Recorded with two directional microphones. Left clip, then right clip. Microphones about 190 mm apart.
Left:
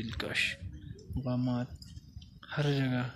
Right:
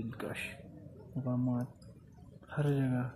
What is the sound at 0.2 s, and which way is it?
Speech, 5° left (ahead or behind).